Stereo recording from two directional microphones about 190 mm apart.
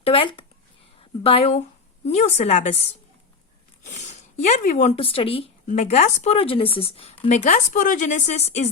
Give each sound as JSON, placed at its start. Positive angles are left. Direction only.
{"t": 0.0, "sound": "speech", "side_deg": 30}
{"t": 3.9, "sound": "speech", "side_deg": 35}